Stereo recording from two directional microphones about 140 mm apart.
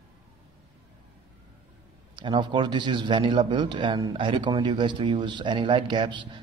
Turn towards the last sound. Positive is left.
turn(degrees=-35)  # may be behind; listen again after turning